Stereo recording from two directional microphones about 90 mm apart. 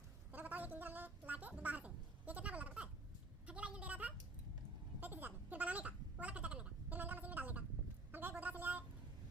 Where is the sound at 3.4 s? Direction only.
15° right (ahead or behind).